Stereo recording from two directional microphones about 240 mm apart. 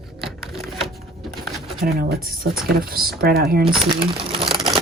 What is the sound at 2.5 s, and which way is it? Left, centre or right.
Speech, right.